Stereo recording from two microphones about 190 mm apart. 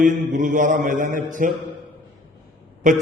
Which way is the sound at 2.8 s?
40° right (ahead or behind).